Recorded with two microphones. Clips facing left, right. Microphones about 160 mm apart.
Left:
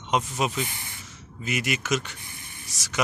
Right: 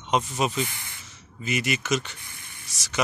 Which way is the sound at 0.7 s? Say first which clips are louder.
Left 1 dB; 20° left (ahead or behind).